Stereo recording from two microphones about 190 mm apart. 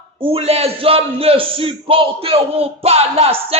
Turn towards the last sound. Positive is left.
turn(degrees=-30)  # may be behind; listen again after turning